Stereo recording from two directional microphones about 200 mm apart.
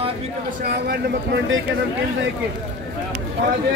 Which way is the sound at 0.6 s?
50° right (ahead or behind).